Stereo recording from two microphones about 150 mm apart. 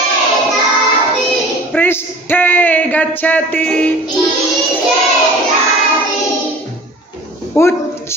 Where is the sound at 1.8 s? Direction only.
10° left (ahead or behind).